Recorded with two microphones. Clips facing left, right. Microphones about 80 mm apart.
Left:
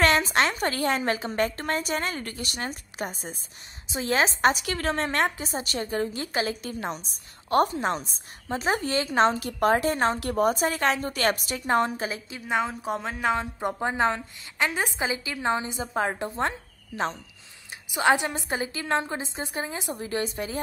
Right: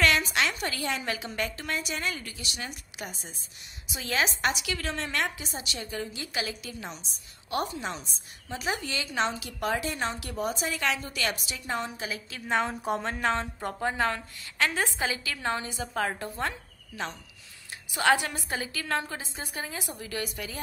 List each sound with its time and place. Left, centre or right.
0.0 s a woman's voice: left
3.9 s a woman's voice: left
12.4 s a woman's voice: centre; by 17.2 s left
17.9 s a woman's voice: left